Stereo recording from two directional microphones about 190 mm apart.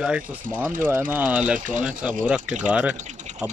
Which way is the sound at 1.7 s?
45° right (ahead or behind).